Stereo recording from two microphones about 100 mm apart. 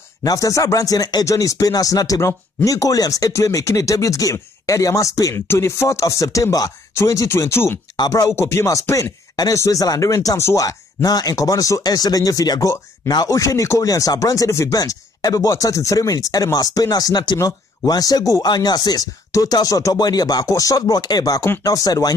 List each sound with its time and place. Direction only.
0.2 s speech: 35° left (ahead or behind)
7.9 s speech: 35° left (ahead or behind)